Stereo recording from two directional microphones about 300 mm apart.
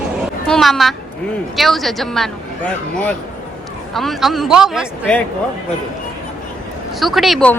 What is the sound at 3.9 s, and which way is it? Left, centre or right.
A man's voice, centre.